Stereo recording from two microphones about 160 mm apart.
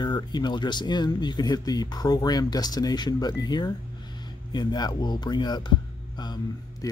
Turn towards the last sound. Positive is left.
turn(degrees=25)  # may be behind; listen again after turning